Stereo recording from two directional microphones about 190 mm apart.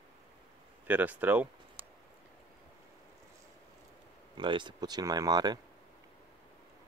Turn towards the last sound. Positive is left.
turn(degrees=-20)  # may be behind; listen again after turning